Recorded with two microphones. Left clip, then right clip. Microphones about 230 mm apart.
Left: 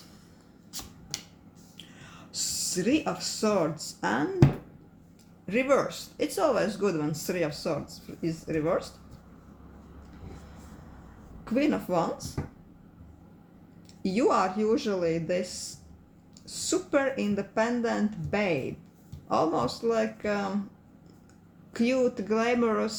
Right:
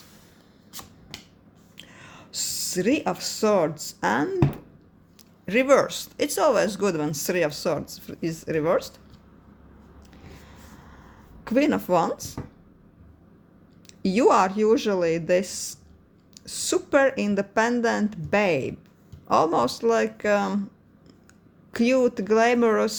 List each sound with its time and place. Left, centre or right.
1.7 s speech: right
5.5 s speech: right
11.4 s speech: right
14.0 s speech: right
21.7 s speech: right